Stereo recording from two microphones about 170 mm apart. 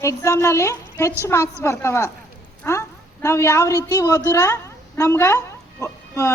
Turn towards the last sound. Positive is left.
turn(degrees=15)  # may be behind; listen again after turning